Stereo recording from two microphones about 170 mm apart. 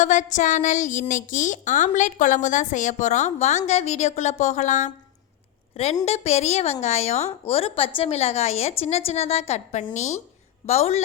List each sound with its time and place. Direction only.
0.0 s a woman's voice: 45° left (ahead or behind)